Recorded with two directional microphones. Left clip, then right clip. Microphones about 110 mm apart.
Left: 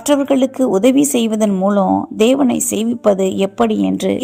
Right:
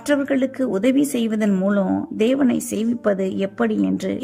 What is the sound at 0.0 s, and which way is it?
A woman's voice, 15° left (ahead or behind).